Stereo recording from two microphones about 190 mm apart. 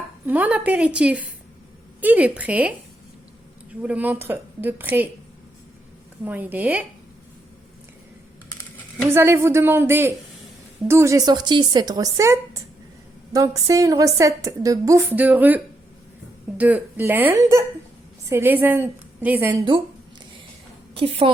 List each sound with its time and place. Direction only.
0.3 s a woman's voice: 10° right (ahead or behind)
3.8 s a woman's voice: 10° right (ahead or behind)
6.2 s a woman's voice: 10° right (ahead or behind)
9.0 s a woman's voice: 15° right (ahead or behind)
20.9 s a woman's voice: 30° right (ahead or behind)